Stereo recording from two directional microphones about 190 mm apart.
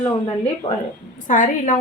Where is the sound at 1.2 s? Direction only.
45° left (ahead or behind).